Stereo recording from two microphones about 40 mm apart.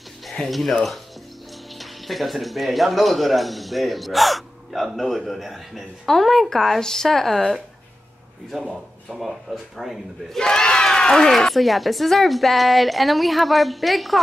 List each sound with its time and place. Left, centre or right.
0.2 s speech: centre
10.4 s speech: centre
11.3 s speech: centre